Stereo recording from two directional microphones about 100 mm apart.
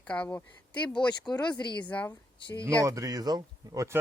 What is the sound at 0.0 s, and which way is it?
Speech, 15° left (ahead or behind).